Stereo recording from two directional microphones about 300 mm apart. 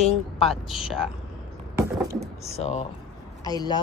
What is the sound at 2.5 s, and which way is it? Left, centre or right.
Speech, left.